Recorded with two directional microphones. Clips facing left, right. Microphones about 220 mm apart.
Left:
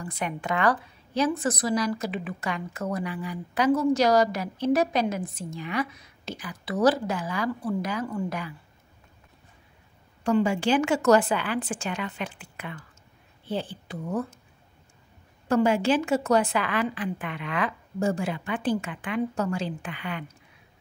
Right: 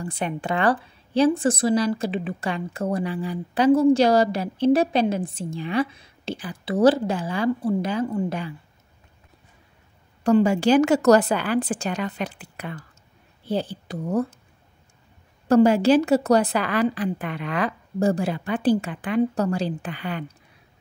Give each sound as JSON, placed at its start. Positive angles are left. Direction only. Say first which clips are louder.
{"t": 0.0, "sound": "a woman's voice", "louder": "right 4 dB", "side_deg": -30}
{"t": 10.2, "sound": "a woman's voice", "louder": "right 5 dB", "side_deg": -40}
{"t": 15.4, "sound": "a woman's voice", "louder": "right 6 dB", "side_deg": -40}